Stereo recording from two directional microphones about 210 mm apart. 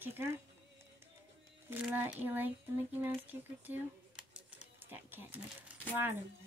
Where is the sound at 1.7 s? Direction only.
10° right (ahead or behind).